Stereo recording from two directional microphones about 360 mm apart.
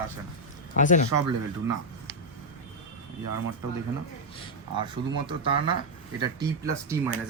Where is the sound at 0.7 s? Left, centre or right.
Left.